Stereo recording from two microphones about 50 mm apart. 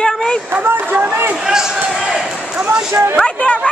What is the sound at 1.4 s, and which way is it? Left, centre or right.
Basketball bounce, centre.